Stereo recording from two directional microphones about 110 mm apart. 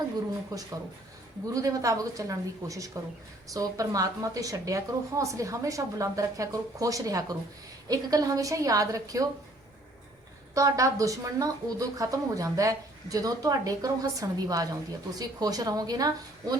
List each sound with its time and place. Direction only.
0.5 s a woman's voice: 35° right (ahead or behind)
10.5 s a woman's voice: 30° right (ahead or behind)